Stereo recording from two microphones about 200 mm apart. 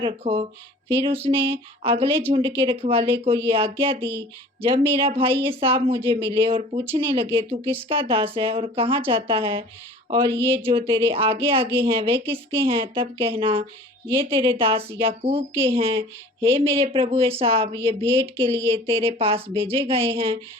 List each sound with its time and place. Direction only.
0.0 s speech: 30° right (ahead or behind)